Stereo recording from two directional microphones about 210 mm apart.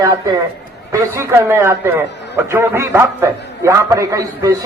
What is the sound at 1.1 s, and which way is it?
A man's voice, 10° right (ahead or behind).